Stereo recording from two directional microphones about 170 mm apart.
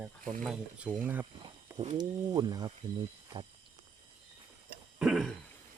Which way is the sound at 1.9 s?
25° right (ahead or behind).